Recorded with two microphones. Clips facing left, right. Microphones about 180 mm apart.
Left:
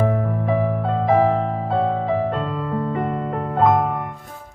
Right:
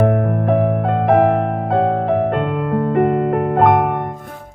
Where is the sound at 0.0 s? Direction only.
60° right (ahead or behind).